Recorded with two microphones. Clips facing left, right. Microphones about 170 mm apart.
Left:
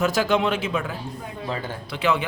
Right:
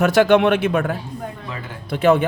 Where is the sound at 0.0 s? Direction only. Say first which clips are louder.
Right 7 dB; 65° right (ahead or behind).